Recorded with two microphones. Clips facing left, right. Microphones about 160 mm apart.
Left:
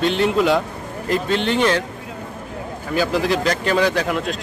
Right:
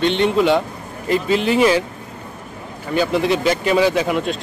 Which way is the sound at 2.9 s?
Centre (ahead or behind).